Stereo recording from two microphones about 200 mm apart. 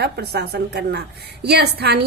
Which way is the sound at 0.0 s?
55° right (ahead or behind).